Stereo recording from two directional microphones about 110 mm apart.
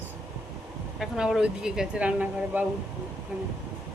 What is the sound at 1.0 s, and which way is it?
Speech, 5° right (ahead or behind).